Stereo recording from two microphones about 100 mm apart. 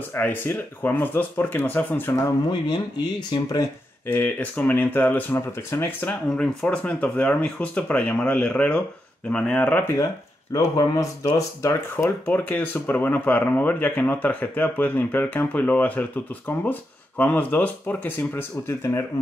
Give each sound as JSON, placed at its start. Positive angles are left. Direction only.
{"t": 0.1, "sound": "speech", "side_deg": 20}
{"t": 3.3, "sound": "speech", "side_deg": 45}
{"t": 4.1, "sound": "speech", "side_deg": 15}
{"t": 6.3, "sound": "speech", "side_deg": 10}
{"t": 10.5, "sound": "speech", "side_deg": 35}
{"t": 12.3, "sound": "speech", "side_deg": 15}